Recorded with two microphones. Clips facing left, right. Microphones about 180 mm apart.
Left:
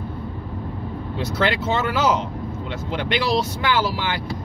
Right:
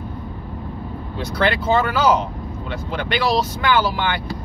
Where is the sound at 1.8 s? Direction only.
25° left (ahead or behind).